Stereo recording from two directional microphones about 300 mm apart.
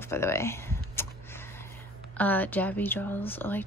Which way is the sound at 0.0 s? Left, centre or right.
Centre.